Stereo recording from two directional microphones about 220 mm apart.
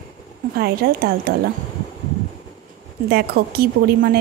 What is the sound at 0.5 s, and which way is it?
Speech, 45° right (ahead or behind).